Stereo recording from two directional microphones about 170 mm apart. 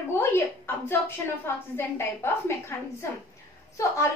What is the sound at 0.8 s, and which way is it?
A woman's voice, 15° left (ahead or behind).